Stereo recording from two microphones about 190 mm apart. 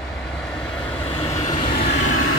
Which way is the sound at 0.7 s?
5° left (ahead or behind).